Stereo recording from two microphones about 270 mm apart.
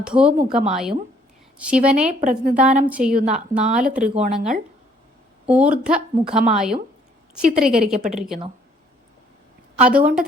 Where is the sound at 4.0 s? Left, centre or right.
Right.